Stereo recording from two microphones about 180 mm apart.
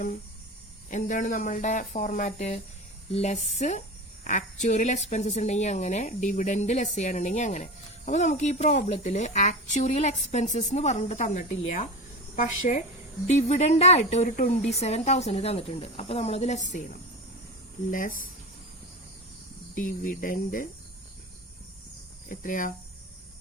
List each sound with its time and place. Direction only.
0.9 s speech: 45° left (ahead or behind)
17.9 s speech: 50° left (ahead or behind)
19.7 s speech: 45° left (ahead or behind)
22.3 s speech: 50° left (ahead or behind)